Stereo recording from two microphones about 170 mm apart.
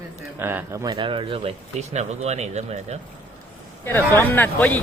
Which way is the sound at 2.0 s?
40° right (ahead or behind).